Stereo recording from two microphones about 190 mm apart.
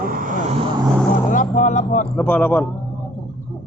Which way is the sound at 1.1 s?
45° left (ahead or behind).